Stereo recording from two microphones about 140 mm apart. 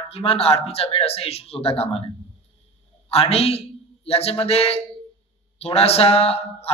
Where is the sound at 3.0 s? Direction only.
45° left (ahead or behind).